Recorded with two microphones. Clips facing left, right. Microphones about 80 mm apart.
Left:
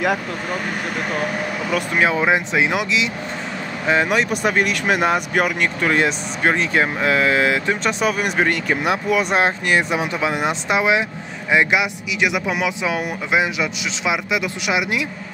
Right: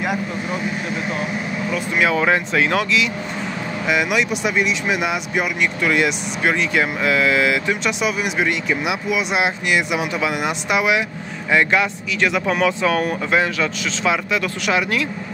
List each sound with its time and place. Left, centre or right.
0.0 s speech: left
2.0 s speech: left
3.8 s speech: left
11.5 s speech: centre